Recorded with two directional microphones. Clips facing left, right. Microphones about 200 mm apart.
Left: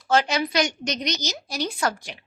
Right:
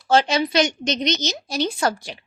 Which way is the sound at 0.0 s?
30° right (ahead or behind).